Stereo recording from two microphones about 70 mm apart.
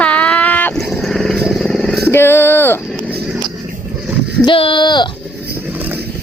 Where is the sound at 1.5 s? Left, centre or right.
Centre.